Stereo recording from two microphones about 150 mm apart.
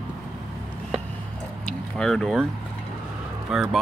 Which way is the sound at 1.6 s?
5° left (ahead or behind).